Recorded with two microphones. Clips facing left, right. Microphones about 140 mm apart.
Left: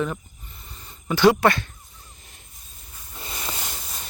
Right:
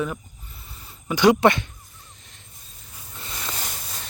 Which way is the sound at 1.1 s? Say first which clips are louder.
Right 1 dB; 15° right (ahead or behind).